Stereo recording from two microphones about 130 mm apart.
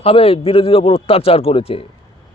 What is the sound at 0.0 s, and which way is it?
A man's voice, 50° left (ahead or behind).